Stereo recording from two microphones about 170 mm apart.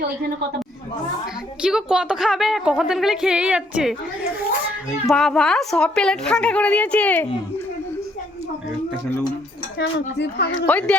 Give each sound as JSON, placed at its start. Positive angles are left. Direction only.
{"t": 1.6, "sound": "a child's voice", "side_deg": -5}
{"t": 10.2, "sound": "speech", "side_deg": 75}
{"t": 10.7, "sound": "speech", "side_deg": 10}